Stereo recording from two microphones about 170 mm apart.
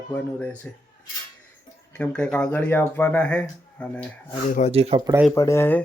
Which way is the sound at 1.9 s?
5° left (ahead or behind).